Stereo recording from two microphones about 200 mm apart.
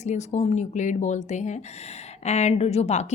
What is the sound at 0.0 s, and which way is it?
Speech, 35° left (ahead or behind).